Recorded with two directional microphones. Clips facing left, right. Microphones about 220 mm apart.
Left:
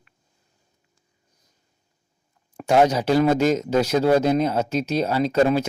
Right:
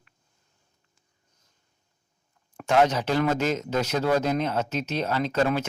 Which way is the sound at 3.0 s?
35° left (ahead or behind).